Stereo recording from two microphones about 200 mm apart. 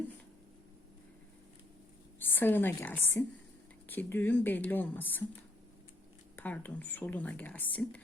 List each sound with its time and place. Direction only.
2.1 s a woman's voice: 10° left (ahead or behind)
6.3 s speech: 10° left (ahead or behind)